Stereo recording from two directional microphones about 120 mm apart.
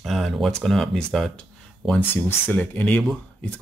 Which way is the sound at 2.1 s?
15° left (ahead or behind).